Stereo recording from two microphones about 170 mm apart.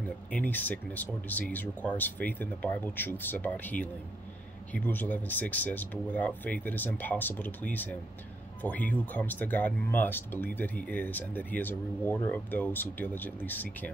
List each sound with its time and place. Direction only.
0.3 s speech: 10° left (ahead or behind)